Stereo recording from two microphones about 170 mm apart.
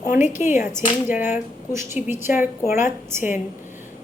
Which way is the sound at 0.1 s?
45° left (ahead or behind).